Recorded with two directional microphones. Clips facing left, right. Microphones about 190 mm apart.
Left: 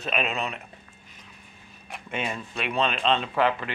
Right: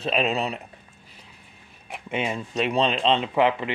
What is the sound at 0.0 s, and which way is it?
Speech, 30° right (ahead or behind).